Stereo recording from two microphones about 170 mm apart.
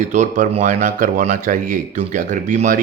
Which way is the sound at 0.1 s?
45° right (ahead or behind).